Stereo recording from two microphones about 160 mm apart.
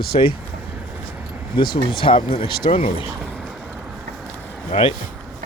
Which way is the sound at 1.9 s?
35° left (ahead or behind).